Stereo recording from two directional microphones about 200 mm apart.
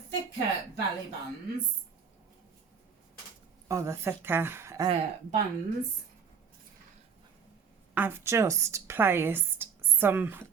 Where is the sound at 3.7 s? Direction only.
15° right (ahead or behind).